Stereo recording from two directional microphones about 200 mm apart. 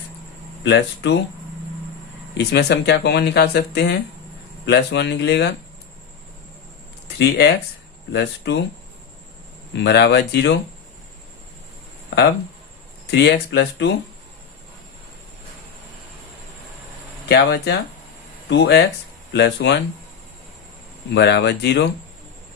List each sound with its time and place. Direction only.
0.6 s speech: 60° left (ahead or behind)
2.4 s speech: 55° left (ahead or behind)
7.2 s speech: 55° left (ahead or behind)
9.7 s speech: 60° left (ahead or behind)
13.1 s speech: 60° left (ahead or behind)
17.2 s speech: 55° left (ahead or behind)
21.1 s speech: 60° left (ahead or behind)